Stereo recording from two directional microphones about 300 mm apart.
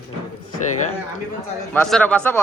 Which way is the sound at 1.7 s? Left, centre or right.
Centre.